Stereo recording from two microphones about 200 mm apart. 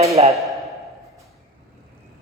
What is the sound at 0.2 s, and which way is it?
Speech, 30° right (ahead or behind).